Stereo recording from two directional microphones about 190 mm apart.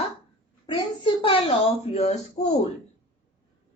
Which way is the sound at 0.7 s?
25° left (ahead or behind).